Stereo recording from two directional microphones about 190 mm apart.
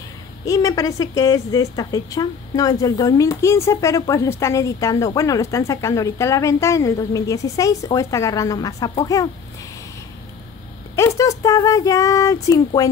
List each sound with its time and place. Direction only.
0.5 s a woman's voice: 15° left (ahead or behind)
11.0 s a woman's voice: 15° left (ahead or behind)